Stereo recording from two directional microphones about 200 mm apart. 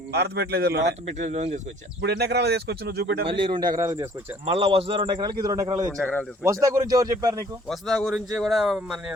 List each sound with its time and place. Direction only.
0.1 s speech: 55° right (ahead or behind)
1.3 s speech: 35° right (ahead or behind)
2.0 s speech: 55° right (ahead or behind)
3.2 s a man's voice: 25° right (ahead or behind)
4.5 s a man's voice: 25° right (ahead or behind)
6.0 s a man's voice: 5° left (ahead or behind)
6.4 s speech: 15° right (ahead or behind)
7.7 s a man's voice: centre (ahead or behind)